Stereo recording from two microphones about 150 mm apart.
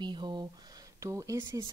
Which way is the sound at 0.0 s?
30° right (ahead or behind).